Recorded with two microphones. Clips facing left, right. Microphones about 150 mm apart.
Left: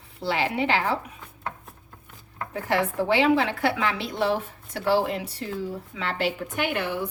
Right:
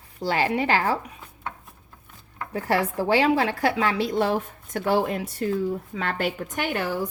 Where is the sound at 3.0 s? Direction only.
45° right (ahead or behind).